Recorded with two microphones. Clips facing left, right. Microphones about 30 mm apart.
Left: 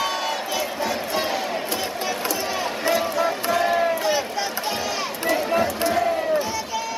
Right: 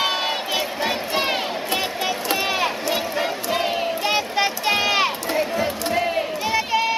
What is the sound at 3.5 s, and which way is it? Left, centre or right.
Crowd, right.